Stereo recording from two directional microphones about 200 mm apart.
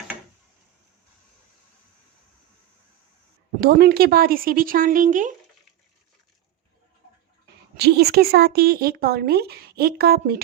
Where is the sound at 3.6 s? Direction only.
50° right (ahead or behind).